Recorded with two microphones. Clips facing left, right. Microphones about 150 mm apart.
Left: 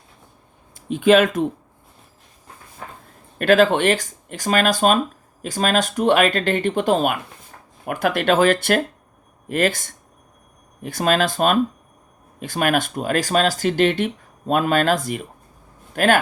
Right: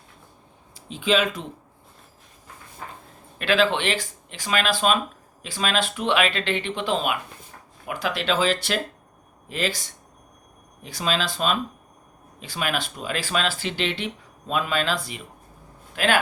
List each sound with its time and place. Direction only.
0.9 s speech: 55° left (ahead or behind)
3.3 s speech: 45° left (ahead or behind)